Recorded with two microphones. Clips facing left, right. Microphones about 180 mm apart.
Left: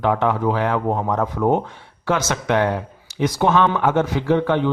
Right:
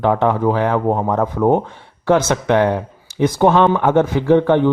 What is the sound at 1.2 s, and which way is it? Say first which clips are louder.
Speech: right 4 dB; 40° right (ahead or behind).